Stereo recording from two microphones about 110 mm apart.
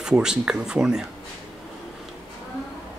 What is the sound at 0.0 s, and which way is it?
Speech, 5° right (ahead or behind).